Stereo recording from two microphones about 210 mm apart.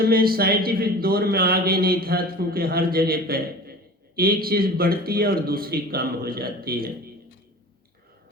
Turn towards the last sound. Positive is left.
turn(degrees=-45)  # may be behind; listen again after turning